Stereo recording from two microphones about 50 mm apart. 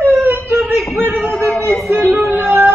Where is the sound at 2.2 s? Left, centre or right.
Right.